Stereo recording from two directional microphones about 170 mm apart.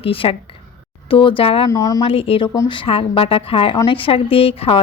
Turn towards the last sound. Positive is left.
turn(degrees=35)  # may be behind; listen again after turning